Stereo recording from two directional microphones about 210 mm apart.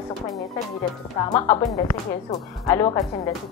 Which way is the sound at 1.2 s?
15° left (ahead or behind).